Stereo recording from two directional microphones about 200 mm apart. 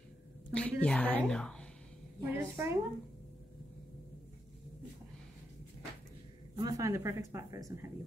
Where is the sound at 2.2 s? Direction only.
10° right (ahead or behind).